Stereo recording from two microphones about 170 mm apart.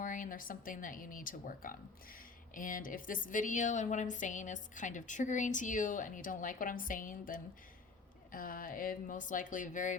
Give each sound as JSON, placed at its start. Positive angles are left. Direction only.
{"t": 0.0, "sound": "speech", "side_deg": 50}